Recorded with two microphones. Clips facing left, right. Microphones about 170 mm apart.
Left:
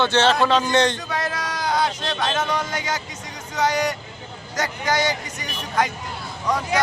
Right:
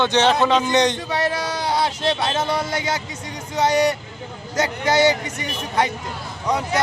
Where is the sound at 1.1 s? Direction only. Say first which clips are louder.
Right 4 dB; 30° right (ahead or behind).